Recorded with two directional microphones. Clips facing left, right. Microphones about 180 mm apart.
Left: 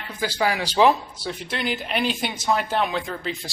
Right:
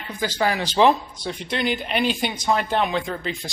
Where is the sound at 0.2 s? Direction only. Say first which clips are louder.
Right 1 dB; 10° left (ahead or behind).